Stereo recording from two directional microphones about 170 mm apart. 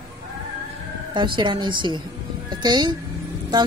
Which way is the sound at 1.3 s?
25° right (ahead or behind).